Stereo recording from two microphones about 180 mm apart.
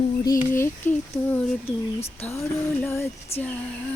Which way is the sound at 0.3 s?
15° left (ahead or behind).